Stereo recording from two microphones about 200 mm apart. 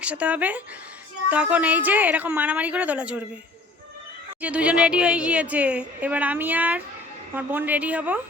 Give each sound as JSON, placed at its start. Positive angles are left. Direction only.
{"t": 0.0, "sound": "a woman's voice", "side_deg": -5}
{"t": 4.4, "sound": "a woman's voice", "side_deg": -5}